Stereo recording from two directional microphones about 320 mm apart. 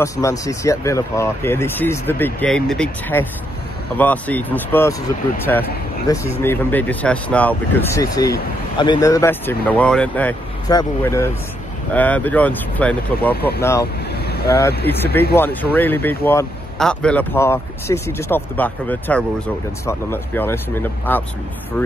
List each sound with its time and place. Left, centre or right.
0.0 s speech: centre
14.1 s boat: left
15.3 s speech: centre